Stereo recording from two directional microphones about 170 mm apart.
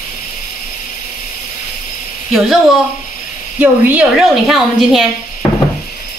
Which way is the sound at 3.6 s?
10° right (ahead or behind).